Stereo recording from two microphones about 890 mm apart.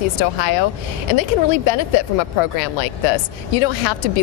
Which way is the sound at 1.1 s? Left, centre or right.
Left.